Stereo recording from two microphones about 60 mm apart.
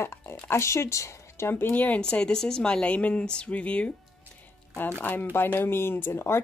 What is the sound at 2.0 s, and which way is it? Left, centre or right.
Speech, centre.